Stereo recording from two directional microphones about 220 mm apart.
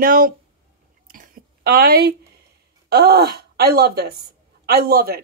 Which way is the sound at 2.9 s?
45° right (ahead or behind).